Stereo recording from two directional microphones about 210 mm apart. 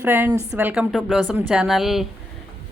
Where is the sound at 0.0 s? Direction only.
10° right (ahead or behind).